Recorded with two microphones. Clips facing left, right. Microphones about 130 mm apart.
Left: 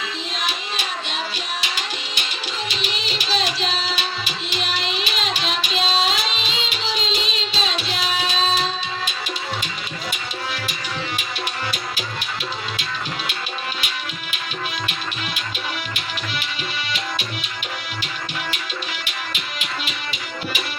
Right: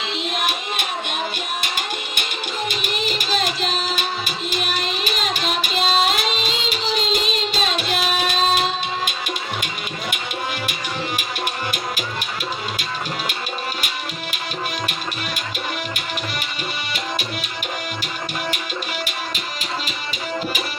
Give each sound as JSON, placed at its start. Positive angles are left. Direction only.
{"t": 0.2, "sound": "music", "side_deg": -55}
{"t": 19.0, "sound": "music", "side_deg": -40}